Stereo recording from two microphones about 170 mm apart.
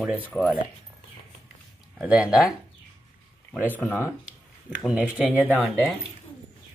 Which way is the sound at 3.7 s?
10° left (ahead or behind).